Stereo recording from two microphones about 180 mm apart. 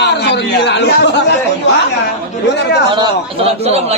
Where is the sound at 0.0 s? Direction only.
70° left (ahead or behind).